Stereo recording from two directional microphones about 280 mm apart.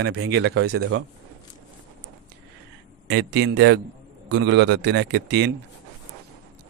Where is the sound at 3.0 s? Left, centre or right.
Right.